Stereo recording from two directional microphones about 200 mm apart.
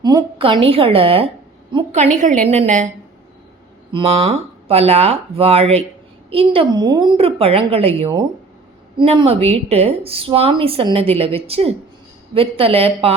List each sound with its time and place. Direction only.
0.0 s a woman's voice: 20° right (ahead or behind); by 2.9 s 35° right (ahead or behind)
3.9 s a woman's voice: 30° right (ahead or behind)